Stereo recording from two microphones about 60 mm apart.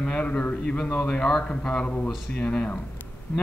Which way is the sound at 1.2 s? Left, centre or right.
Centre.